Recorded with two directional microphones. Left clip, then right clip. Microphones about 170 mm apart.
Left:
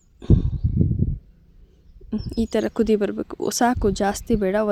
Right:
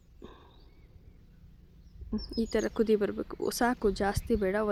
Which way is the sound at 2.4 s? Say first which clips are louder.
Left 7 dB; 40° left (ahead or behind).